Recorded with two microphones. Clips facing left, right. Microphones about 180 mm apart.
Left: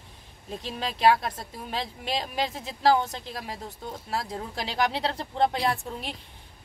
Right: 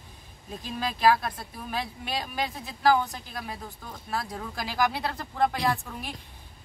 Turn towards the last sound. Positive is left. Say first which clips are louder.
# even
turn(degrees=25)  # may be behind; listen again after turning